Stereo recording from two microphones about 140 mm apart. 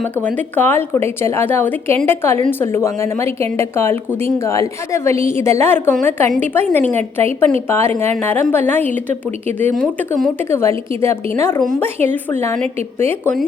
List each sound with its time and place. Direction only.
0.3 s a woman's voice: 15° left (ahead or behind)